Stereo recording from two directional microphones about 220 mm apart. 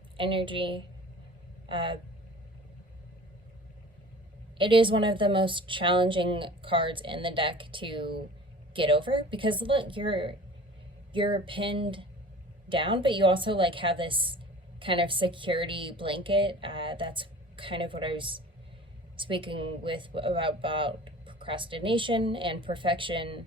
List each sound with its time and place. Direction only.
0.2 s speech: 25° right (ahead or behind)
4.5 s speech: 20° right (ahead or behind)